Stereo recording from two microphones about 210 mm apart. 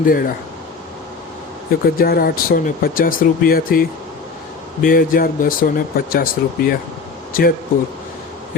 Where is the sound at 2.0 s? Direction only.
45° left (ahead or behind).